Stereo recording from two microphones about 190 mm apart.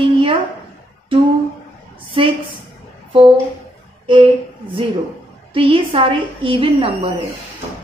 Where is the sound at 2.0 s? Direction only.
30° right (ahead or behind).